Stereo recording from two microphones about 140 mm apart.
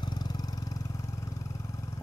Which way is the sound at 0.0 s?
30° left (ahead or behind).